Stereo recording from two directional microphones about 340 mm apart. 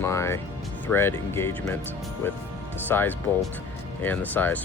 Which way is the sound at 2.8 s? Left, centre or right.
Centre.